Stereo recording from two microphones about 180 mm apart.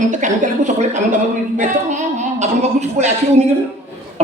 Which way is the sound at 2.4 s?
40° right (ahead or behind).